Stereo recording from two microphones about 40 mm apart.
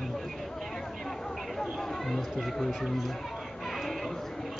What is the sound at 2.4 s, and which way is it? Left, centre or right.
Speech, centre.